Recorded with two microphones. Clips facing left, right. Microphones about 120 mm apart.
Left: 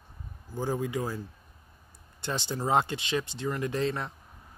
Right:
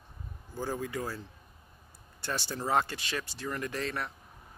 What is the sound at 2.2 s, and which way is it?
Speech, 20° left (ahead or behind).